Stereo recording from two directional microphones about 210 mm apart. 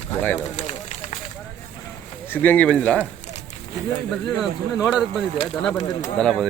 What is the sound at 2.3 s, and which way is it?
Speech, 10° left (ahead or behind).